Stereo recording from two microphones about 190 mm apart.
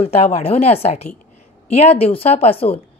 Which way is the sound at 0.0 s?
30° left (ahead or behind).